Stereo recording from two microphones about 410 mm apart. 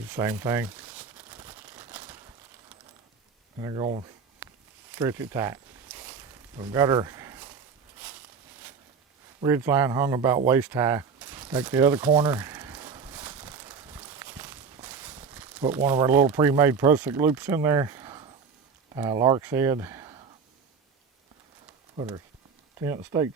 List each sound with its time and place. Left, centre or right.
0.1 s crumpling: centre
3.6 s speech: centre
4.4 s a sound: centre
6.6 s speech: centre
9.4 s a sound: centre
18.9 s speech: centre
21.9 s speech: centre